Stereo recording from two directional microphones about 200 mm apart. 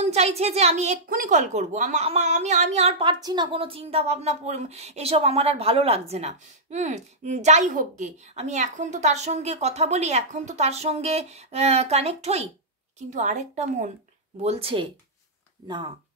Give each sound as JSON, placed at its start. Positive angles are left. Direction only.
{"t": 0.0, "sound": "a woman's voice", "side_deg": -30}